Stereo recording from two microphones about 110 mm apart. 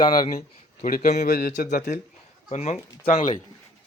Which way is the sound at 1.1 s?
90° left.